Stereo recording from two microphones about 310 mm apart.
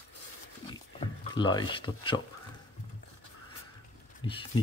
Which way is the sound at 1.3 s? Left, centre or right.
Centre.